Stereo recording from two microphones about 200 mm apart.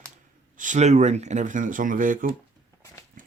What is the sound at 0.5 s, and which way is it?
Speech, 40° right (ahead or behind).